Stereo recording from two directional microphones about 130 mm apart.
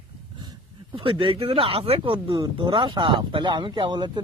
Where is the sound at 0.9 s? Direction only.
40° right (ahead or behind).